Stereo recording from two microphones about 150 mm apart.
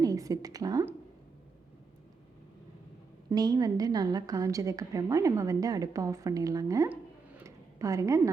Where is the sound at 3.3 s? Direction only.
25° right (ahead or behind).